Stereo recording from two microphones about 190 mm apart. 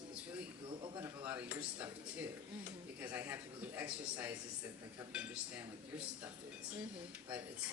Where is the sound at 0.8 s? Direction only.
25° right (ahead or behind).